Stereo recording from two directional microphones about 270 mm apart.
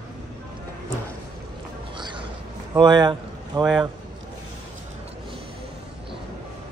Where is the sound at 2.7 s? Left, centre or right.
Centre.